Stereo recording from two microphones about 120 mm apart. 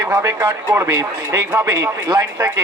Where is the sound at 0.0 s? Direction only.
25° right (ahead or behind).